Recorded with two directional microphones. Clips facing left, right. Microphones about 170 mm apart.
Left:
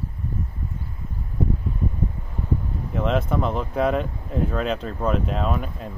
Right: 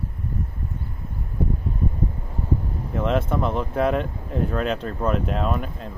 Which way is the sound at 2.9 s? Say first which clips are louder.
Even; centre (ahead or behind).